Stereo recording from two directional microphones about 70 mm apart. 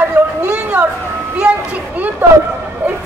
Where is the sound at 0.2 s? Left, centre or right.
Right.